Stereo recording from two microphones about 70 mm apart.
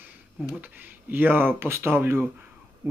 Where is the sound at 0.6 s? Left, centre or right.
Right.